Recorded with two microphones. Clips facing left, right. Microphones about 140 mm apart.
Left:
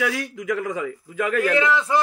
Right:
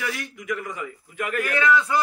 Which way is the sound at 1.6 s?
25° left (ahead or behind).